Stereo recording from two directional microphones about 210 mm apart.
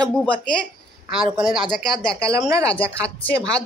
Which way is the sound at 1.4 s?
25° right (ahead or behind).